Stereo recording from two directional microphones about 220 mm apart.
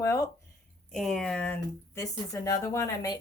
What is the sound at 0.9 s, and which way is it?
Speech, centre (ahead or behind).